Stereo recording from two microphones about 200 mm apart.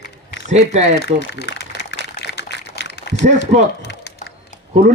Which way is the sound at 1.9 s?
55° left (ahead or behind).